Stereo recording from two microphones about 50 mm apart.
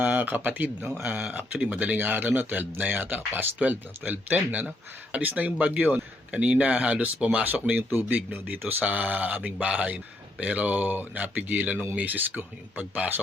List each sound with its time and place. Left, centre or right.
0.0 s a sound: right
0.3 s speech: right
1.0 s speech: centre
1.7 s speech: right